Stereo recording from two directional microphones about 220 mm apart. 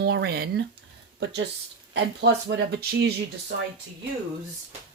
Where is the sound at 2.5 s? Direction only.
50° right (ahead or behind).